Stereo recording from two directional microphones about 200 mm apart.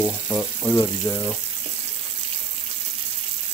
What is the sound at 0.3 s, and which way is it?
Speech, 15° left (ahead or behind).